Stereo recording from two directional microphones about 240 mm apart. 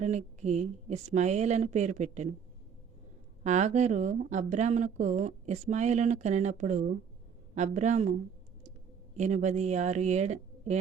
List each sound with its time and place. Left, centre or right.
0.0 s speech: right
3.4 s speech: right
9.1 s speech: right